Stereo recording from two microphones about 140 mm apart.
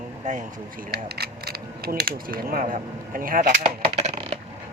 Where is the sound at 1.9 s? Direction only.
90° right.